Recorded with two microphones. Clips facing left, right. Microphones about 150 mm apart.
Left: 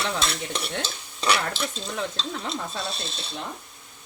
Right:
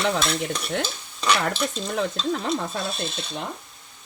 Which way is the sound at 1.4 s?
55° right (ahead or behind).